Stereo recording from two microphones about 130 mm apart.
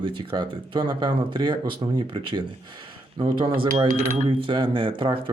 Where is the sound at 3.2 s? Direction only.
40° right (ahead or behind).